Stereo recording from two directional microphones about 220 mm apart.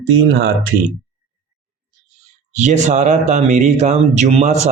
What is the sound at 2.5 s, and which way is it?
Speech, 30° right (ahead or behind).